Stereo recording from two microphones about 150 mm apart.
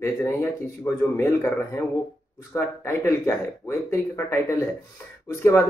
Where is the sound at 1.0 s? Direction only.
15° left (ahead or behind).